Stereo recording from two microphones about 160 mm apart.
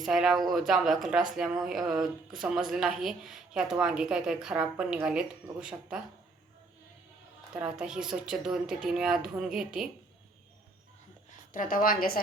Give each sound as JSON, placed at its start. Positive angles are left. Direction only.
{"t": 0.0, "sound": "a woman's voice", "side_deg": 0}
{"t": 7.5, "sound": "a woman's voice", "side_deg": -5}
{"t": 11.5, "sound": "a woman's voice", "side_deg": 60}